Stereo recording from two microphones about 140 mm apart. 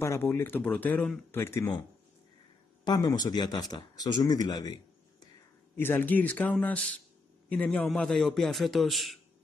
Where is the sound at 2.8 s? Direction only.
30° left (ahead or behind).